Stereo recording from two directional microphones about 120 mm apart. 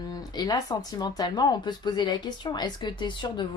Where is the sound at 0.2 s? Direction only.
35° left (ahead or behind).